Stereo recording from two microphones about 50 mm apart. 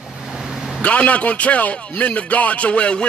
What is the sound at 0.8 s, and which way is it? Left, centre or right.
A man's voice, left.